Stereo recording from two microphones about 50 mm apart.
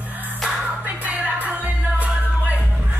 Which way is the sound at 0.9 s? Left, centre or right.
Right.